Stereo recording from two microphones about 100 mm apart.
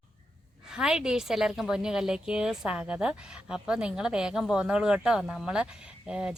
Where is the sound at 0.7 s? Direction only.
5° right (ahead or behind).